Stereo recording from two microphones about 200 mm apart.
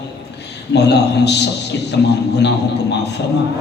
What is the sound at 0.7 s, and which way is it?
Speech, 60° left (ahead or behind).